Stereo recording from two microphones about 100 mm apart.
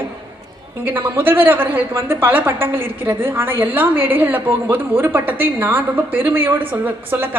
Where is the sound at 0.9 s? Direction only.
20° right (ahead or behind).